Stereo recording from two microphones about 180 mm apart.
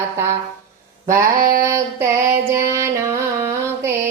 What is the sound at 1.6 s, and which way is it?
Female singing, 15° right (ahead or behind).